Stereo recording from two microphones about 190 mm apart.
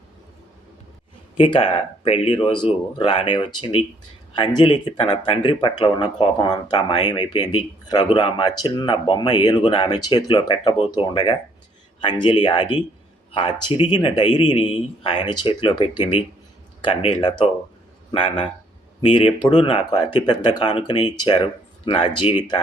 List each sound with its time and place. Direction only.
1.4 s speech: 30° left (ahead or behind)